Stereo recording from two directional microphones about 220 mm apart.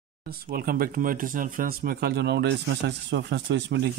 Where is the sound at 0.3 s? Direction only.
40° right (ahead or behind).